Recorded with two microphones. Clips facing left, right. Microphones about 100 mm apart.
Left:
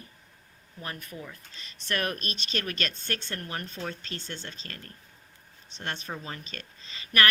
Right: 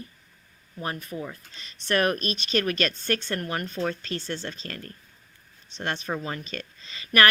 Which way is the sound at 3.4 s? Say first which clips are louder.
Right 7 dB; 60° right (ahead or behind).